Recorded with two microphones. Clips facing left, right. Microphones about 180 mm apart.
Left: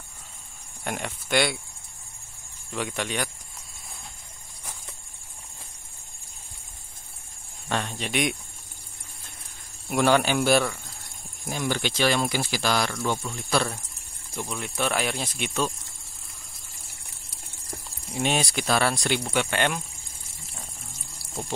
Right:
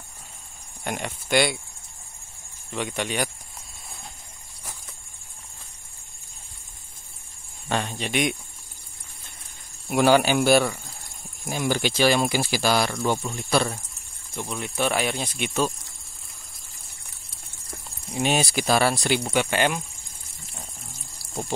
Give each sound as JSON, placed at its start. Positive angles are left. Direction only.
{"t": 0.8, "sound": "speech", "side_deg": 0}
{"t": 2.7, "sound": "speech", "side_deg": 0}
{"t": 7.6, "sound": "speech", "side_deg": 0}
{"t": 9.8, "sound": "speech", "side_deg": -5}
{"t": 12.9, "sound": "speech", "side_deg": -20}
{"t": 13.4, "sound": "speech", "side_deg": -5}
{"t": 18.1, "sound": "speech", "side_deg": -5}